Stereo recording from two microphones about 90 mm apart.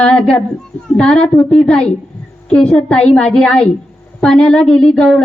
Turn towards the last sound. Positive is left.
turn(degrees=5)  # may be behind; listen again after turning